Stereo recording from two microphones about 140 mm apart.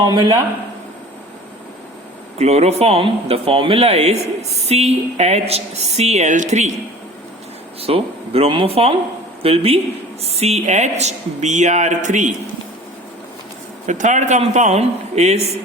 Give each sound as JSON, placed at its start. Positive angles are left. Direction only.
{"t": 0.0, "sound": "a man's voice", "side_deg": -35}
{"t": 2.4, "sound": "a woman's voice", "side_deg": -50}
{"t": 7.8, "sound": "a woman's voice", "side_deg": -45}
{"t": 13.8, "sound": "a man's voice", "side_deg": -60}